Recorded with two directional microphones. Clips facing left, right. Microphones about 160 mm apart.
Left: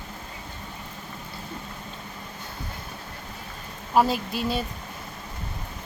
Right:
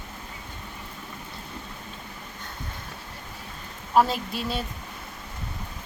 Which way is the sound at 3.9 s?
Centre (ahead or behind).